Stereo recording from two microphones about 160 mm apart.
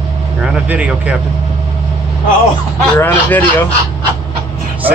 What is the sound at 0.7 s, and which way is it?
Speech, 10° right (ahead or behind).